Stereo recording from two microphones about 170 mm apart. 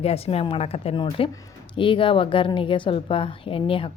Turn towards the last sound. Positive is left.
turn(degrees=30)  # may be behind; listen again after turning